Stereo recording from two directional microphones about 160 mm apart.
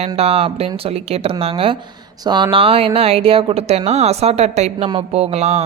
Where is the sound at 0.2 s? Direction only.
40° right (ahead or behind).